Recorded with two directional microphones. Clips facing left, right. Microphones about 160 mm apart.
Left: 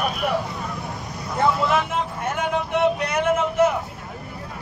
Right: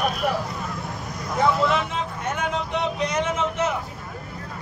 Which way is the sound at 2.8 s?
60° left (ahead or behind).